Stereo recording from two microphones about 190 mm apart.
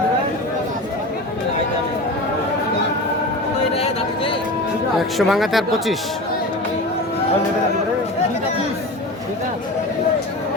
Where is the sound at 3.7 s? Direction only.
30° left (ahead or behind).